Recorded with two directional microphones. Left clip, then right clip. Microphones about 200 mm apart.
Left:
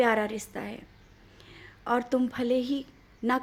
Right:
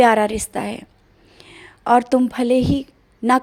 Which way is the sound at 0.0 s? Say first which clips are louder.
Right 11 dB; 45° right (ahead or behind).